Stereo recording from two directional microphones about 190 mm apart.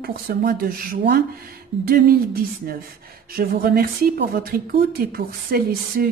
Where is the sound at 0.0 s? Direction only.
50° right (ahead or behind).